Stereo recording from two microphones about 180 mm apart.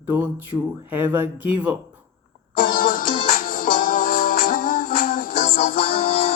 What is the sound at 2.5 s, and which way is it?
Music, 50° left (ahead or behind).